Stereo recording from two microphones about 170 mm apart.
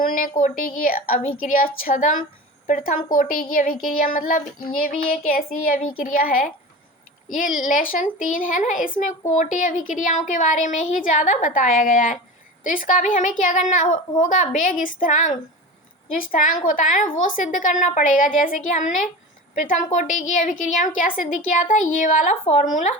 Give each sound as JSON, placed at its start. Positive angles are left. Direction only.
{"t": 0.0, "sound": "a woman's voice", "side_deg": 50}
{"t": 3.1, "sound": "child singing", "side_deg": 55}
{"t": 7.3, "sound": "a woman's voice", "side_deg": 50}